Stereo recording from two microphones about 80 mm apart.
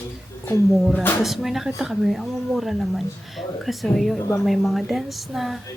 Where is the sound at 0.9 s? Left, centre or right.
Left.